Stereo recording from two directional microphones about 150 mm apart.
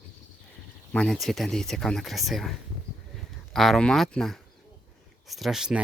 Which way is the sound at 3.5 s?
5° left (ahead or behind).